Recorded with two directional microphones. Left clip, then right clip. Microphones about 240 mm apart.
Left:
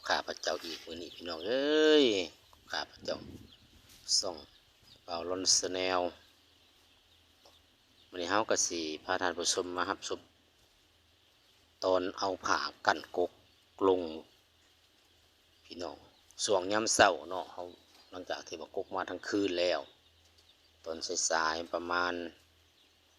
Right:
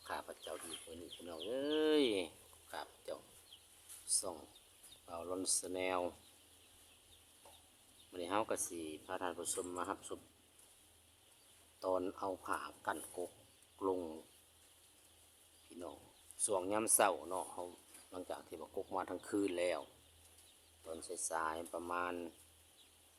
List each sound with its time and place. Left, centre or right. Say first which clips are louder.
0.0 s speech: left 13 dB; centre
4.2 s speech: left 9 dB; centre
8.1 s speech: left 8 dB; centre
11.8 s speech: left 8 dB; centre
15.7 s speech: left 8 dB; centre
20.8 s speech: left 12 dB; centre